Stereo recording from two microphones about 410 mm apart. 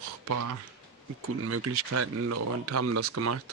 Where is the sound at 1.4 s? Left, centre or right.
Right.